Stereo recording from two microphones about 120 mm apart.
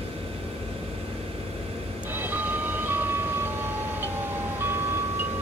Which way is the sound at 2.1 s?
15° right (ahead or behind).